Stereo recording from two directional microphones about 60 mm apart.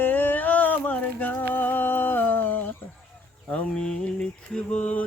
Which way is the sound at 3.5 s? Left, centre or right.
Centre.